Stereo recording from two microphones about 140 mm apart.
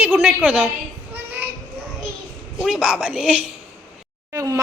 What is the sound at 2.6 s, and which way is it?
Speech, 5° right (ahead or behind).